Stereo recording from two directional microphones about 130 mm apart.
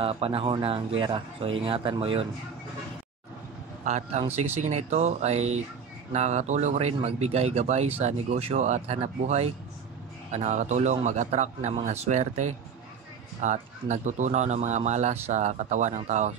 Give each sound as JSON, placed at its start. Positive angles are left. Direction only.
{"t": 0.0, "sound": "speech", "side_deg": -50}
{"t": 3.8, "sound": "speech", "side_deg": -60}